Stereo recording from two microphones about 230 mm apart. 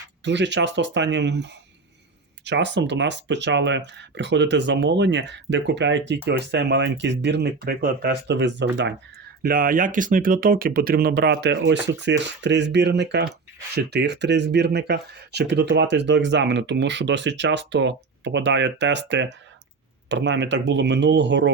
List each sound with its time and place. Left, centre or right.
0.3 s speech: right
9.4 s speech: right